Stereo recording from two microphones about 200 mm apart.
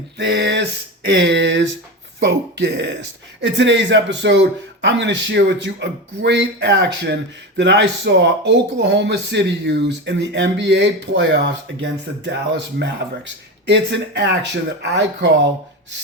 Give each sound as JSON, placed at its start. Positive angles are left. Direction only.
{"t": 0.2, "sound": "a man's voice", "side_deg": -65}